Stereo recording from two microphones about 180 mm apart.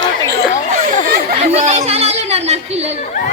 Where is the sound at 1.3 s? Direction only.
35° right (ahead or behind).